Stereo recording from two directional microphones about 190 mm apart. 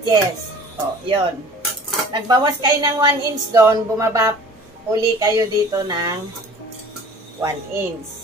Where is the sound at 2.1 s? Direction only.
20° right (ahead or behind).